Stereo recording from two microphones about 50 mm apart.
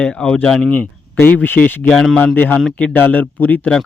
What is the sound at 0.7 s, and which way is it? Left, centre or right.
Speech, left.